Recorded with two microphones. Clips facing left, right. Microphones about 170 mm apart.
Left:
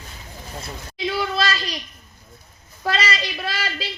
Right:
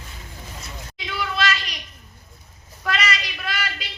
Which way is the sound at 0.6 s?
35° left (ahead or behind).